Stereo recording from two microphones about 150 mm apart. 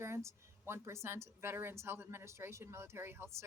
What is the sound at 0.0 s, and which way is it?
Speech, 20° right (ahead or behind).